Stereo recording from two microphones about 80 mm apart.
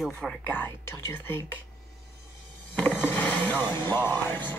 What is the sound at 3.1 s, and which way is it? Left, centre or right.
Music, left.